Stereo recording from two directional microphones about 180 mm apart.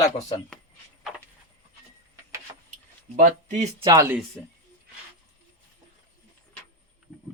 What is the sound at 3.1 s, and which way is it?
Speech, 45° right (ahead or behind).